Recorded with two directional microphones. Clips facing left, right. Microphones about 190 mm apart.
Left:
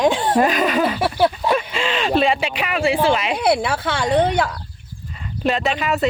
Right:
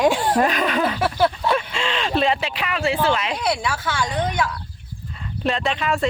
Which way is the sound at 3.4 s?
60° left (ahead or behind).